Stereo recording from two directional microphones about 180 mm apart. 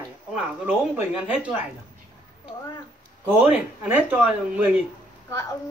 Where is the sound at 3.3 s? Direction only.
5° right (ahead or behind).